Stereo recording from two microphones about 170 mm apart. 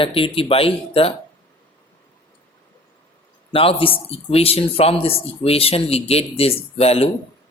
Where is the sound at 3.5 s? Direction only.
35° left (ahead or behind).